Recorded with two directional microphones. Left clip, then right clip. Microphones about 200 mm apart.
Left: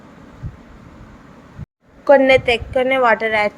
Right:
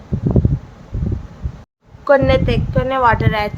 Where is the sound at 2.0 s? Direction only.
10° left (ahead or behind).